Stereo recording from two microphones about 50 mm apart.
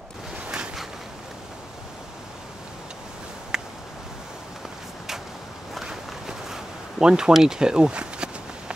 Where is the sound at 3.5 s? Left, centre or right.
Centre.